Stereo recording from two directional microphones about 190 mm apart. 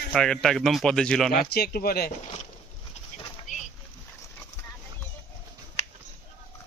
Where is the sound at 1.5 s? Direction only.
55° left (ahead or behind).